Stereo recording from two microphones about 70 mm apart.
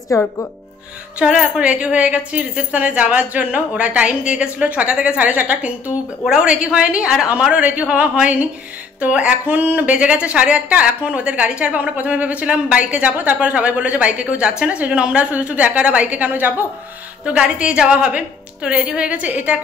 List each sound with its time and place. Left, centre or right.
0.1 s speech: left
1.2 s a woman's voice: centre
17.2 s speech: centre